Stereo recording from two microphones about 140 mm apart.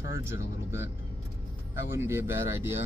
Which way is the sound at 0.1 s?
20° right (ahead or behind).